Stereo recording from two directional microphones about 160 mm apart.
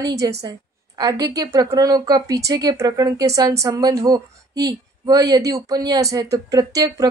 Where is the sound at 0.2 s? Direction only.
25° right (ahead or behind).